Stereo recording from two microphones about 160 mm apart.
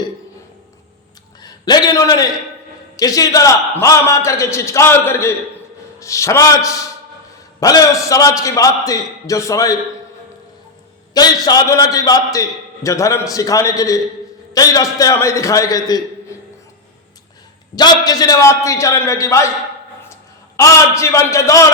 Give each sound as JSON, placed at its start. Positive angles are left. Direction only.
{"t": 1.4, "sound": "a man's voice", "side_deg": 25}
{"t": 11.1, "sound": "a man's voice", "side_deg": 25}
{"t": 17.7, "sound": "a man's voice", "side_deg": 25}
{"t": 20.6, "sound": "a man's voice", "side_deg": 20}